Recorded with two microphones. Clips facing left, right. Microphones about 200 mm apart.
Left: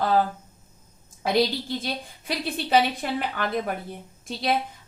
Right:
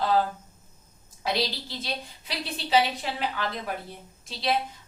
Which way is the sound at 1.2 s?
50° left (ahead or behind).